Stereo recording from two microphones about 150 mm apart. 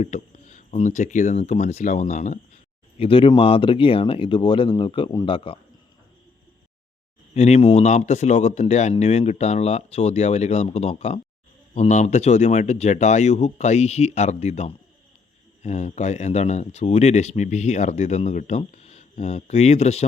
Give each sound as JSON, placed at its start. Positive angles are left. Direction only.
{"t": 0.0, "sound": "speech", "side_deg": 50}
{"t": 3.0, "sound": "speech", "side_deg": 35}
{"t": 7.3, "sound": "speech", "side_deg": 45}